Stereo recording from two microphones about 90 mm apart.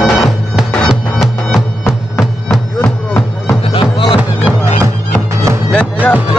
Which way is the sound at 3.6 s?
80° left.